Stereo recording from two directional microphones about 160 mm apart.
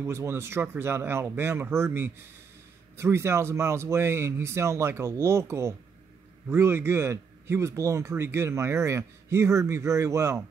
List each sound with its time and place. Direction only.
0.0 s a man's voice: 15° right (ahead or behind)